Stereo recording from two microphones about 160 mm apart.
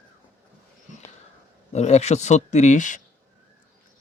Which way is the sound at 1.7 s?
45° left (ahead or behind).